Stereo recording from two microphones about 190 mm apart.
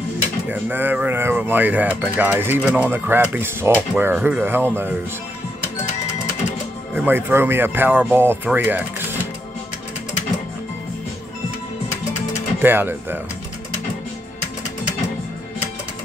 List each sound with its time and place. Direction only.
0.5 s speech: 10° right (ahead or behind)
7.0 s speech: 10° right (ahead or behind)
12.6 s speech: 10° right (ahead or behind)